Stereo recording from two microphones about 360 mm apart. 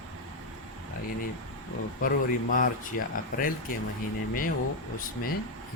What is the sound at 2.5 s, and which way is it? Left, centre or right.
Speech, left.